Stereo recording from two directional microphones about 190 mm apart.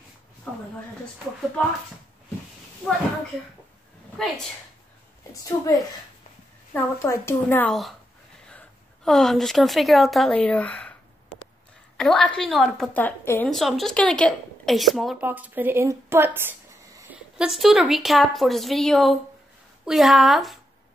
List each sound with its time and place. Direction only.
5.3 s a woman's voice: 15° left (ahead or behind)
12.0 s a woman's voice: centre (ahead or behind)
17.5 s a woman's voice: centre (ahead or behind)